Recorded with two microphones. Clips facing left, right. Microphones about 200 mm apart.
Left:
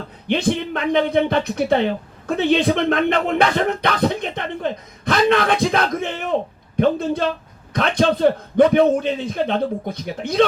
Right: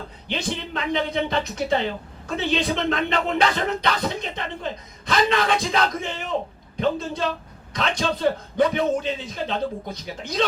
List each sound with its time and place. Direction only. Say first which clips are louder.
0.3 s speech: left 9 dB; 55° left (ahead or behind)